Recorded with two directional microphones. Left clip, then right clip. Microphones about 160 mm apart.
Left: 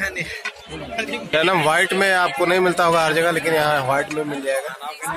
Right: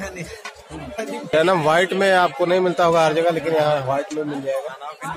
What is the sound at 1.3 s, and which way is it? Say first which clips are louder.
A man's voice: right 1 dB; 10° right (ahead or behind).